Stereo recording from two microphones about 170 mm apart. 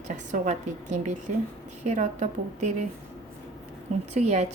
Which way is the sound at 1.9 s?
40° right (ahead or behind).